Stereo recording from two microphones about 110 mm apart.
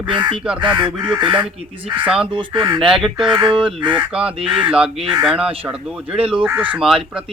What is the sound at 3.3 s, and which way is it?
Speech, 45° right (ahead or behind).